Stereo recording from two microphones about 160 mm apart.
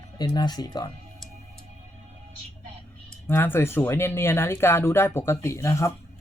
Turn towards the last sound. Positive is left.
turn(degrees=20)  # may be behind; listen again after turning